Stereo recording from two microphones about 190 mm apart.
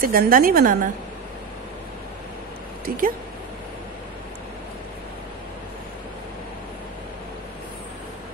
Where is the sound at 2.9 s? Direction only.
50° right (ahead or behind).